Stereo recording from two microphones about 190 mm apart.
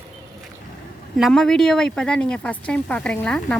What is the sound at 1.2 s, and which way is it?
Speech, centre (ahead or behind).